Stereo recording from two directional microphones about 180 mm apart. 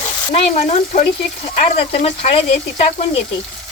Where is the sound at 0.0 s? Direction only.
35° left (ahead or behind).